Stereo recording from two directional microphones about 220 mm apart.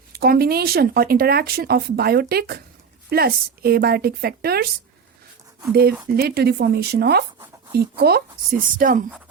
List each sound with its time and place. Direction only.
0.1 s speech: 45° right (ahead or behind)
6.1 s speech: 45° right (ahead or behind)